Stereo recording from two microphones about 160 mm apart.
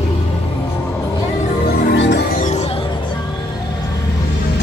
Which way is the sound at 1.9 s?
90° left.